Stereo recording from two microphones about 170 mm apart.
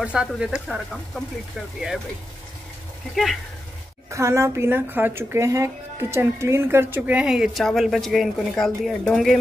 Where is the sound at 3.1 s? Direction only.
Centre (ahead or behind).